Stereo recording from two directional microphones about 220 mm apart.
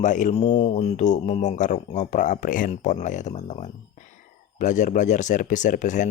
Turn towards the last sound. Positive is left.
turn(degrees=35)  # may be behind; listen again after turning